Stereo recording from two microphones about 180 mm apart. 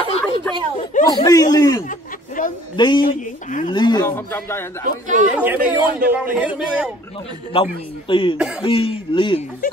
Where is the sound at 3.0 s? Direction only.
45° left (ahead or behind).